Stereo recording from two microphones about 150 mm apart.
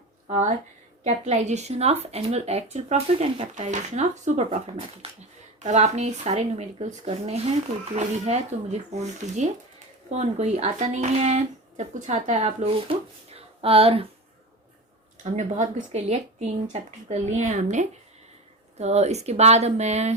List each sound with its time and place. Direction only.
0.3 s speech: 50° right (ahead or behind)
15.2 s speech: 50° right (ahead or behind)